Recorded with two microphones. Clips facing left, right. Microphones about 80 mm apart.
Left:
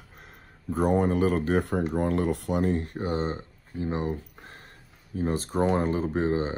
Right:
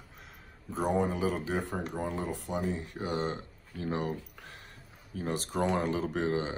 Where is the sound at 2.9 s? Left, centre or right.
Left.